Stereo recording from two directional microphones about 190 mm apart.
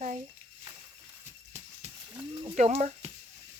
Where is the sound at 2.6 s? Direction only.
40° right (ahead or behind).